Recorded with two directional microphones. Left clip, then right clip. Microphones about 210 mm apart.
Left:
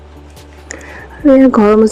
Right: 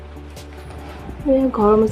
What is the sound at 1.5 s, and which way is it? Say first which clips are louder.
Speech: left 6 dB; 35° left (ahead or behind).